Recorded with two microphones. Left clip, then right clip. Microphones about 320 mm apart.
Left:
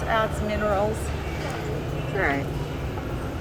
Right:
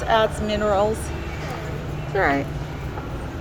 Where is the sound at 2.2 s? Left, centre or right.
Right.